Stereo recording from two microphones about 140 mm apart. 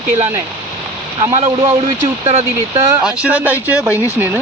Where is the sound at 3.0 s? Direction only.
10° right (ahead or behind).